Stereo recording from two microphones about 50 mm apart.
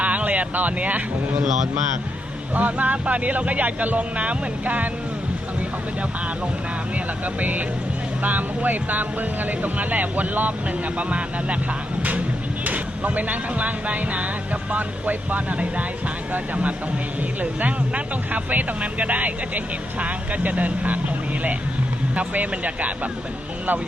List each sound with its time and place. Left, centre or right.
0.0 s speech: right
2.6 s speech: right
7.3 s speech: right
12.6 s speech: right
17.4 s speech: right
22.1 s speech: right